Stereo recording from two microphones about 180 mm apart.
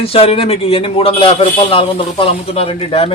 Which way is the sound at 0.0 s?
30° left (ahead or behind).